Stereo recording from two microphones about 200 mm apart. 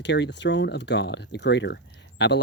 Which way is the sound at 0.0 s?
60° left (ahead or behind).